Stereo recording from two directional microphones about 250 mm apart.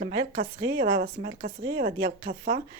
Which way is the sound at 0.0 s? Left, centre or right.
Right.